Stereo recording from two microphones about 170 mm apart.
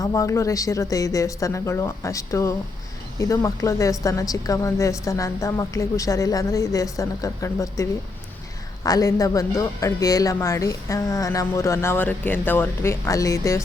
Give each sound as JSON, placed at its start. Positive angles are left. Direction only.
{"t": 0.0, "sound": "speech", "side_deg": 20}